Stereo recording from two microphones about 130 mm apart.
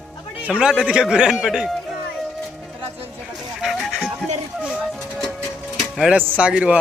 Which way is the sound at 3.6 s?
Centre (ahead or behind).